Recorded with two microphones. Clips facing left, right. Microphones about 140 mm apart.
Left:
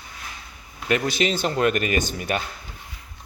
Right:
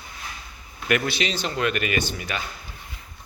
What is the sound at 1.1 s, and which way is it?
Speech, 45° left (ahead or behind).